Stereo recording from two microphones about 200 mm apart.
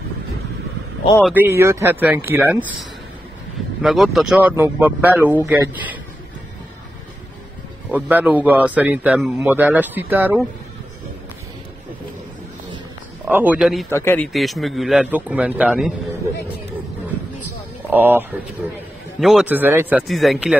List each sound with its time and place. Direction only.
1.2 s a man's voice: 10° right (ahead or behind)
3.8 s a man's voice: centre (ahead or behind)
7.9 s a man's voice: 10° right (ahead or behind)
13.3 s speech: 10° right (ahead or behind)
13.8 s speech: 10° left (ahead or behind); by 15.9 s 5° right (ahead or behind)
17.8 s a man's voice: 10° right (ahead or behind)